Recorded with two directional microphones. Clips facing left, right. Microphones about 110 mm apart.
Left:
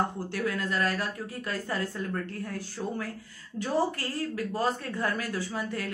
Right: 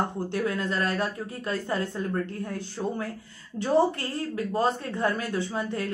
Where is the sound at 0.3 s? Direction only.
25° right (ahead or behind).